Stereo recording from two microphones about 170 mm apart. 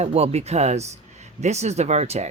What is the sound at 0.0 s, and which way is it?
Speech, 35° right (ahead or behind).